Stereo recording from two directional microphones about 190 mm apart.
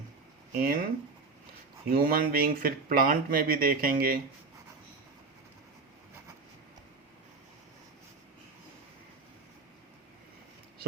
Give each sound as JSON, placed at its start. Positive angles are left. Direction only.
{"t": 0.6, "sound": "speech", "side_deg": -50}
{"t": 1.9, "sound": "speech", "side_deg": -50}